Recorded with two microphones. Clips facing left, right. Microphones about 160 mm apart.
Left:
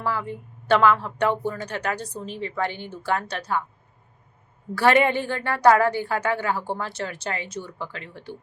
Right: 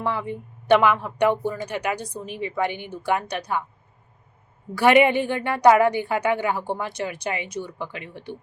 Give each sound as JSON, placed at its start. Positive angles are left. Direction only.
{"t": 0.0, "sound": "a woman's voice", "side_deg": -20}
{"t": 4.7, "sound": "a woman's voice", "side_deg": -15}